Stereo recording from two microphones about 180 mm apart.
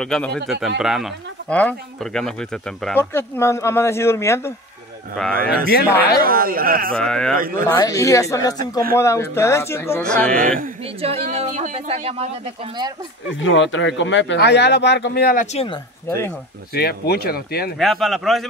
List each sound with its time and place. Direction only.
0.0 s speech: 5° left (ahead or behind)
5.2 s speech: 5° left (ahead or behind)
6.2 s speech: 55° right (ahead or behind)
7.0 s speech: 5° left (ahead or behind)
7.3 s speech: 50° right (ahead or behind)
7.7 s speech: 20° left (ahead or behind)
11.0 s speech: 35° right (ahead or behind)
13.4 s speech: 90° left; by 15.4 s 60° left (ahead or behind)
15.5 s speech: 30° left (ahead or behind)
16.1 s speech: 15° left (ahead or behind)
16.7 s speech: 60° left (ahead or behind)
17.7 s speech: centre (ahead or behind)